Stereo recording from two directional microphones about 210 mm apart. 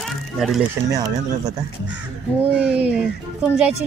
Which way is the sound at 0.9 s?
15° right (ahead or behind).